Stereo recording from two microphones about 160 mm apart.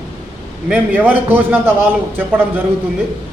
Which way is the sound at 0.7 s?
10° right (ahead or behind).